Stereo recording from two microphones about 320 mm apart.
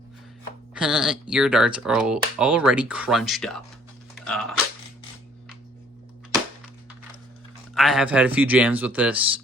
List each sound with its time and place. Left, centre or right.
0.7 s speech: centre
4.2 s a sound: centre
7.8 s speech: centre